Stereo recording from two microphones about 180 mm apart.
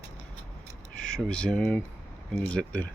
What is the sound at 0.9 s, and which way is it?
Speech, 5° left (ahead or behind).